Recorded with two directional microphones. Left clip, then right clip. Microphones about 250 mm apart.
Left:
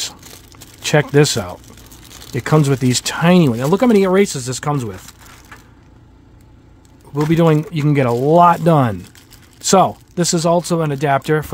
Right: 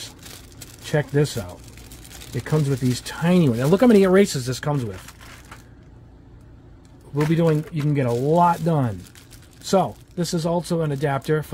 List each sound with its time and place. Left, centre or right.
0.8 s speech: left
7.3 s speech: left